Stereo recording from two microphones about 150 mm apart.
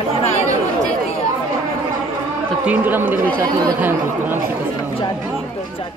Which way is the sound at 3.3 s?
25° right (ahead or behind).